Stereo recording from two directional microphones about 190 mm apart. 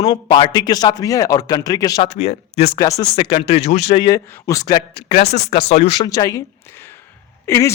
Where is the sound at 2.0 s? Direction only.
35° left (ahead or behind).